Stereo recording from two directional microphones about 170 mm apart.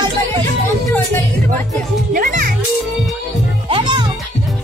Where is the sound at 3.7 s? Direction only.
25° right (ahead or behind).